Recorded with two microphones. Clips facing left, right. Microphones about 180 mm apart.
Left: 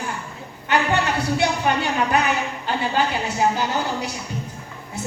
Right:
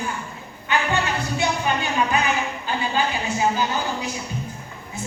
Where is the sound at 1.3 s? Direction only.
70° left (ahead or behind).